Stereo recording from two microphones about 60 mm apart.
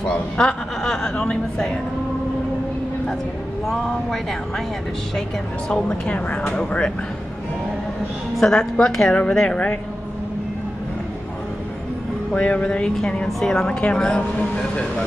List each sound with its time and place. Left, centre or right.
0.8 s a woman's voice: centre
3.6 s speech: centre
5.7 s a woman's voice: centre
8.4 s a woman's voice: centre
12.4 s a woman's voice: left